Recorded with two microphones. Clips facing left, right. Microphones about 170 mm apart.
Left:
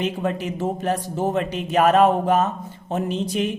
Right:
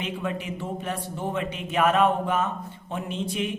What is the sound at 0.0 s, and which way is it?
A man's voice, 40° left (ahead or behind).